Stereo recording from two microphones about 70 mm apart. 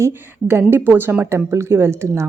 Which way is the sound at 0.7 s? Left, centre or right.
Right.